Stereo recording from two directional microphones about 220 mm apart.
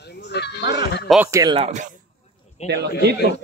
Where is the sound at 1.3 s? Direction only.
15° right (ahead or behind).